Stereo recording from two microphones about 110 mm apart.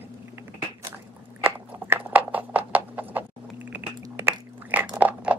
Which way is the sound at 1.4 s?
15° right (ahead or behind).